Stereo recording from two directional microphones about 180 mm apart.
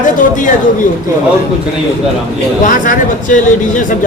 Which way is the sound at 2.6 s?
50° left (ahead or behind).